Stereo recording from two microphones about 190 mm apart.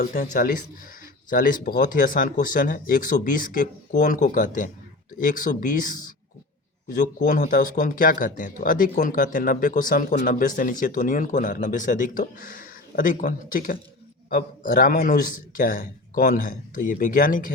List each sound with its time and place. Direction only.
0.0 s speech: 45° left (ahead or behind)